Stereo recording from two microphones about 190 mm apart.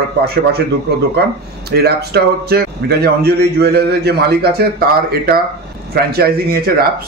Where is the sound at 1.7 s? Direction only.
60° right (ahead or behind).